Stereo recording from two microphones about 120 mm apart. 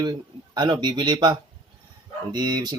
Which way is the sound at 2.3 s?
35° right (ahead or behind).